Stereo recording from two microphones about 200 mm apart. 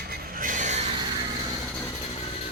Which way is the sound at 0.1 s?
45° right (ahead or behind).